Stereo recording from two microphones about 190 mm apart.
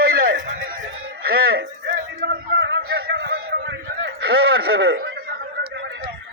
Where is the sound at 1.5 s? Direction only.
55° right (ahead or behind).